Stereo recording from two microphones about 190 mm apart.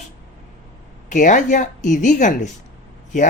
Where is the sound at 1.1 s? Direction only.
40° left (ahead or behind).